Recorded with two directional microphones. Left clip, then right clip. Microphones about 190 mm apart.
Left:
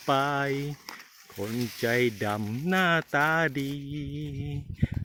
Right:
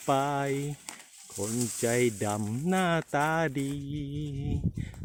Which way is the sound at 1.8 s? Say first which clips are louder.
Left 2 dB; 5° right (ahead or behind).